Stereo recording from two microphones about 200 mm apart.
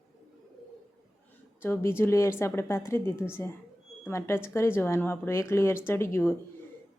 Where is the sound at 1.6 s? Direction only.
10° left (ahead or behind).